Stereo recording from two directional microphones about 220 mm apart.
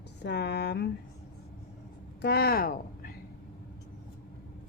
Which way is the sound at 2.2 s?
45° left (ahead or behind).